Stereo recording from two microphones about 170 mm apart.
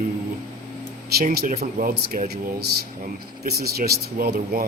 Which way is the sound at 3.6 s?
65° right (ahead or behind).